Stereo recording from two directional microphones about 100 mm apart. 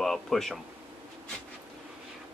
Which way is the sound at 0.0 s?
5° left (ahead or behind).